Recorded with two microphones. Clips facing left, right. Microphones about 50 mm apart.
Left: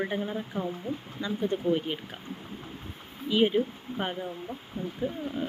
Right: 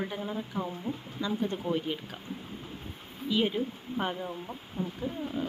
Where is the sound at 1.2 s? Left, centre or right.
Centre.